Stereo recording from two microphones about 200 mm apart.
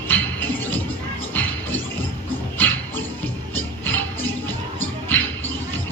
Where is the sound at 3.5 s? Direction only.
10° left (ahead or behind).